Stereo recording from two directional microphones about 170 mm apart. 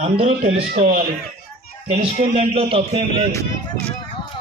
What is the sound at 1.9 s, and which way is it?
A man's voice, 40° right (ahead or behind).